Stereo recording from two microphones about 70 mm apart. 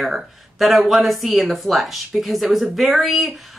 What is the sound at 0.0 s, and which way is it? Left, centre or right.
A woman's voice, centre.